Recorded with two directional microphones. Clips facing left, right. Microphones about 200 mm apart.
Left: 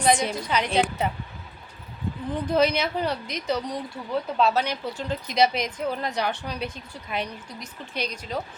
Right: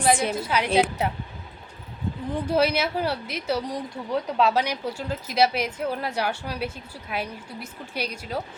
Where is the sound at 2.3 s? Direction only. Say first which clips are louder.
Even; 10° right (ahead or behind).